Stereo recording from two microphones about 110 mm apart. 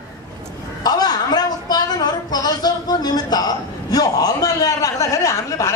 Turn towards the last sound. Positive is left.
turn(degrees=30)  # may be behind; listen again after turning